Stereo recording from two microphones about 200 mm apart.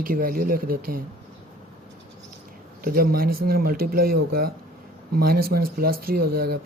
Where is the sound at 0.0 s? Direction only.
45° right (ahead or behind).